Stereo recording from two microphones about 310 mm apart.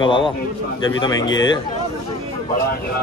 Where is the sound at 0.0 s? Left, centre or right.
Centre.